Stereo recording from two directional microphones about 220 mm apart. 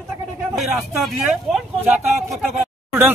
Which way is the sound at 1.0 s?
5° right (ahead or behind).